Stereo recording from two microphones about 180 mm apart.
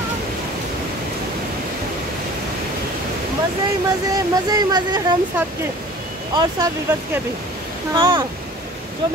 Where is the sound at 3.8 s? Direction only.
20° right (ahead or behind).